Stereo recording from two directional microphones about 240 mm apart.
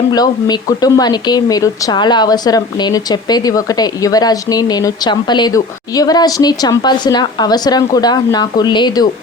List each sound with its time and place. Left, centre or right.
0.1 s speech: centre